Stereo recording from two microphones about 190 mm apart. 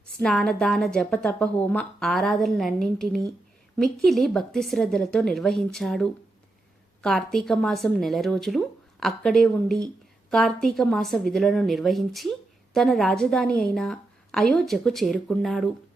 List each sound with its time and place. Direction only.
0.0 s a woman's voice: 5° left (ahead or behind)